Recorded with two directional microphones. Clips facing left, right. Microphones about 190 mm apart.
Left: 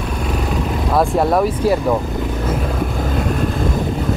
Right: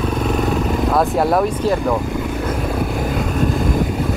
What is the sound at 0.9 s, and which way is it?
Speech, centre (ahead or behind).